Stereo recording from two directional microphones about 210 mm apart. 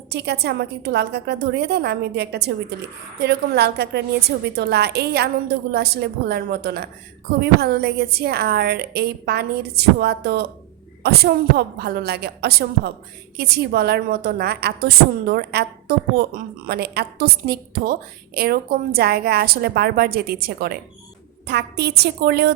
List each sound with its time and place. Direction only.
0.1 s a woman's voice: 50° right (ahead or behind)